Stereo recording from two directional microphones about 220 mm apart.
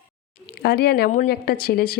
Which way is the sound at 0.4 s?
45° left (ahead or behind).